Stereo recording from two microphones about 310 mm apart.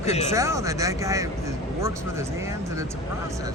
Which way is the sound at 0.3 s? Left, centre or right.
Centre.